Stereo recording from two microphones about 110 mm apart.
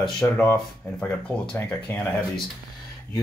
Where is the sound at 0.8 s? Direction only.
15° left (ahead or behind).